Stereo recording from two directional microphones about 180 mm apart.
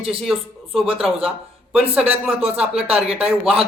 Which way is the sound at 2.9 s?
35° right (ahead or behind).